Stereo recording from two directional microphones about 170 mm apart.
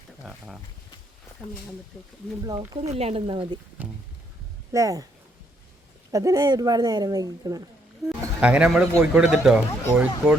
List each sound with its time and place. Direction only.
0.3 s speech: 5° right (ahead or behind)
2.4 s speech: 25° right (ahead or behind)
2.8 s speech: 35° right (ahead or behind)
4.7 s speech: 20° right (ahead or behind)
6.1 s speech: 20° right (ahead or behind)
8.4 s a man's voice: 5° right (ahead or behind)